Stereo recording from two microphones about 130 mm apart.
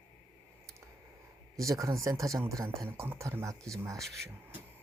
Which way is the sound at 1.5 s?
25° right (ahead or behind).